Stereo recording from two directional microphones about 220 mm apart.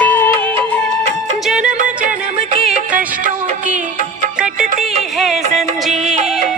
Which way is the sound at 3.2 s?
35° right (ahead or behind).